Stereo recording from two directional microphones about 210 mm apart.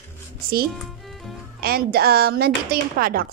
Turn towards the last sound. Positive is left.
turn(degrees=-45)  # may be behind; listen again after turning